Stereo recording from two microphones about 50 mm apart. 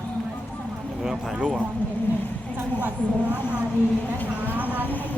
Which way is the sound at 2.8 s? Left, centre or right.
Right.